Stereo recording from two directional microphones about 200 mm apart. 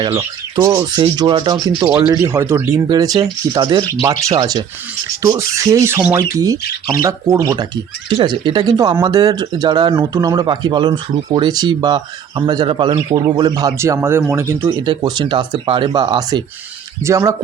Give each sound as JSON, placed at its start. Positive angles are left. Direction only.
{"t": 0.0, "sound": "speech", "side_deg": -15}